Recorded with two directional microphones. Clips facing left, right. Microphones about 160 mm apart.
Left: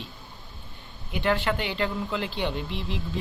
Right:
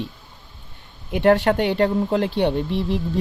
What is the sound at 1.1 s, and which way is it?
Speech, 65° right (ahead or behind).